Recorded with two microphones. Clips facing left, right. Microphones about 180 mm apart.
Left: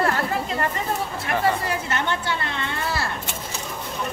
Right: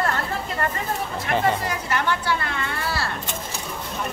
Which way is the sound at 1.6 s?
25° left (ahead or behind).